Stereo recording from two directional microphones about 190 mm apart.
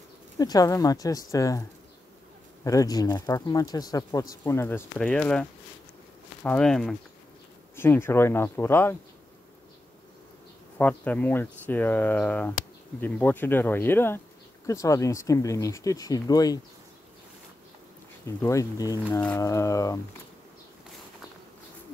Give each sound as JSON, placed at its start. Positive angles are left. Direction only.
{"t": 0.4, "sound": "speech", "side_deg": 20}
{"t": 10.8, "sound": "speech", "side_deg": 10}
{"t": 18.2, "sound": "speech", "side_deg": 15}